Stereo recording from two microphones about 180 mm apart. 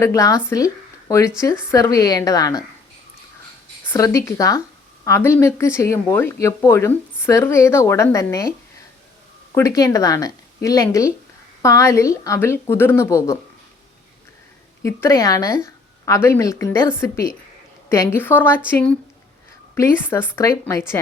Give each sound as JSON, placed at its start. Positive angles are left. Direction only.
{"t": 0.0, "sound": "speech", "side_deg": 15}
{"t": 3.8, "sound": "speech", "side_deg": 15}
{"t": 9.6, "sound": "speech", "side_deg": 20}
{"t": 14.8, "sound": "speech", "side_deg": 15}